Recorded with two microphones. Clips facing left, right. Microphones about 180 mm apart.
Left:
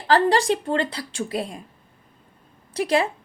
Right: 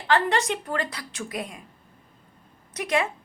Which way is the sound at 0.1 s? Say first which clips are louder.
Left 5 dB; 35° left (ahead or behind).